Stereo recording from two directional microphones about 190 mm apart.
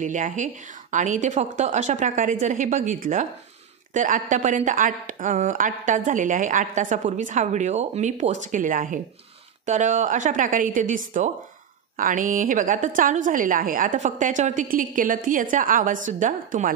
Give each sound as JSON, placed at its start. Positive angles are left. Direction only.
{"t": 0.0, "sound": "a woman's voice", "side_deg": -40}